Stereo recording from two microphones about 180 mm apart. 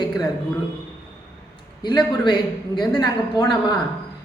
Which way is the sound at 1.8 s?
25° left (ahead or behind).